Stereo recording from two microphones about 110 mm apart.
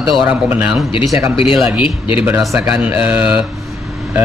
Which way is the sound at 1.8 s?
50° left (ahead or behind).